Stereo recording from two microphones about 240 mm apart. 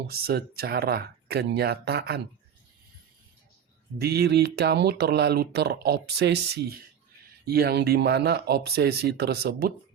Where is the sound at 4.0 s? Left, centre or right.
Right.